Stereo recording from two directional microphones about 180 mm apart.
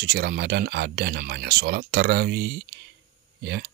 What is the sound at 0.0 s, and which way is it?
Speech, 60° right (ahead or behind).